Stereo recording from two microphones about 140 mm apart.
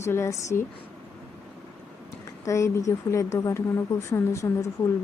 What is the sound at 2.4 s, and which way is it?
A woman's voice, 20° left (ahead or behind).